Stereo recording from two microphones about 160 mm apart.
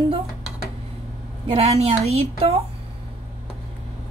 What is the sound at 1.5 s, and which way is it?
A woman's voice, 40° right (ahead or behind).